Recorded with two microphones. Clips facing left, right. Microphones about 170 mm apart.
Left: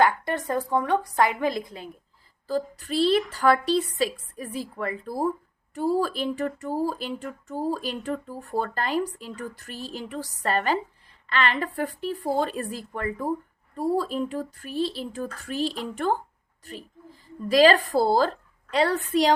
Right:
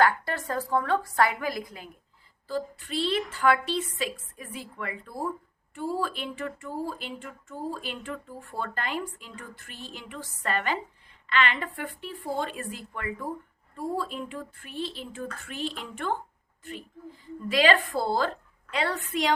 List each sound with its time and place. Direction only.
0.0 s a woman's voice: 20° left (ahead or behind)
2.5 s speech: 40° left (ahead or behind)
17.5 s speech: 40° left (ahead or behind)